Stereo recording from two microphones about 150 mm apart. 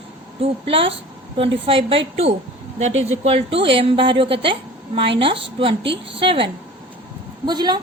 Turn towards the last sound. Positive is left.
turn(degrees=-30)  # may be behind; listen again after turning